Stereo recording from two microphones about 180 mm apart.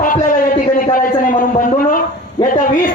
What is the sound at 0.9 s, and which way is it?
A man's voice, 50° left (ahead or behind).